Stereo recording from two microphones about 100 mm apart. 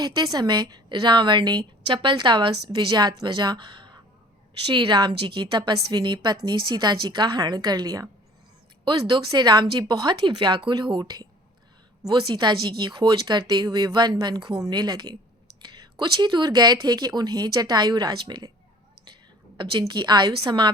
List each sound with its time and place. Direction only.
0.0 s a woman's voice: 40° right (ahead or behind)
8.8 s a woman's voice: 50° right (ahead or behind)
10.2 s a woman's voice: 55° right (ahead or behind)
19.9 s a woman's voice: 45° right (ahead or behind)